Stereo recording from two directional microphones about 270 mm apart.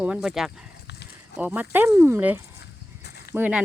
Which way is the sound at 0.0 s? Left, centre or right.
Centre.